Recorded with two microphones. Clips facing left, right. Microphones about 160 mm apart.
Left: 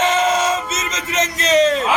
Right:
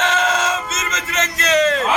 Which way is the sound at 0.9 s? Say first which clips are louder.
Left 3 dB; 20° left (ahead or behind).